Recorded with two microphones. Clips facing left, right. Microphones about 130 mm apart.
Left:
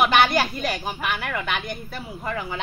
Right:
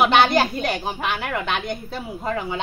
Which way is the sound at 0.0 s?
25° right (ahead or behind).